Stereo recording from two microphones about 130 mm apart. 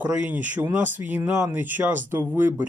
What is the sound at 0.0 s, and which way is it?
Speech, 10° right (ahead or behind).